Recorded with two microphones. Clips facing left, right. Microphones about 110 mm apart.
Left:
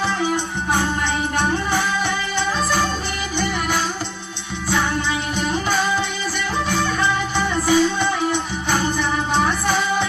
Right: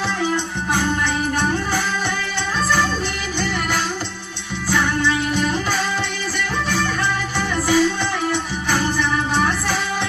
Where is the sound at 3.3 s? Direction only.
15° left (ahead or behind).